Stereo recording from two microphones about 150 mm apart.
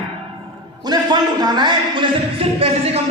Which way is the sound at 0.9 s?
30° right (ahead or behind).